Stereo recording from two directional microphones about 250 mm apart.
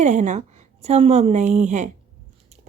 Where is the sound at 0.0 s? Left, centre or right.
Right.